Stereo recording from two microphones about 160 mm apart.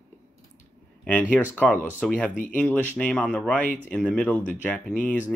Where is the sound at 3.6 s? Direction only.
50° left (ahead or behind).